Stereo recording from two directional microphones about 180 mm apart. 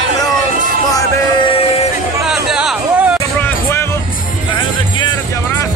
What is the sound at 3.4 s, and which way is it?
Music, 15° left (ahead or behind).